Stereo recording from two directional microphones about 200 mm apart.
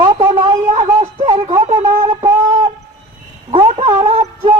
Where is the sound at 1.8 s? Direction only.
15° right (ahead or behind).